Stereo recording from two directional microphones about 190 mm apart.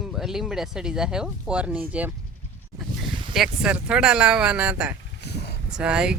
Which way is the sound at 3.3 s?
Centre (ahead or behind).